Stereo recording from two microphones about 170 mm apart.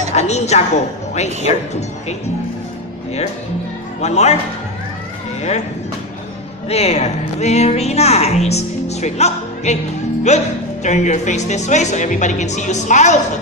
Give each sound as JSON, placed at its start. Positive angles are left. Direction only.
{"t": 0.1, "sound": "a sound", "side_deg": 40}
{"t": 1.5, "sound": "a woman's voice", "side_deg": 40}
{"t": 4.0, "sound": "a woman's voice", "side_deg": 40}
{"t": 5.4, "sound": "speech", "side_deg": 40}
{"t": 6.7, "sound": "a woman's voice", "side_deg": 40}